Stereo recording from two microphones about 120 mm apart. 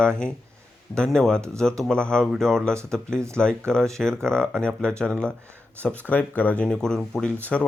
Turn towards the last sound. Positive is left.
turn(degrees=10)  # may be behind; listen again after turning